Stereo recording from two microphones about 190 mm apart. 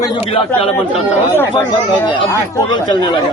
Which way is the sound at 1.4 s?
10° left (ahead or behind).